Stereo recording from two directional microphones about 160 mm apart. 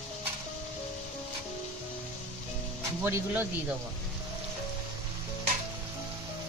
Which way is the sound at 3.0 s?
15° right (ahead or behind).